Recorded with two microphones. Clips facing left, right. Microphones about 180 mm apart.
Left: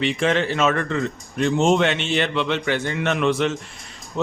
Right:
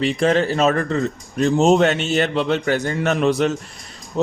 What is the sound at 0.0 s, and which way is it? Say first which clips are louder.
A man's voice: right 3 dB; 40° right (ahead or behind).